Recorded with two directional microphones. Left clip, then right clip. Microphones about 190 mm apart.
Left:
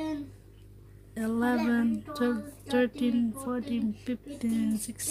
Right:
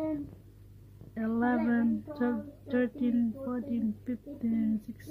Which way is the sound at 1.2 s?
10° left (ahead or behind).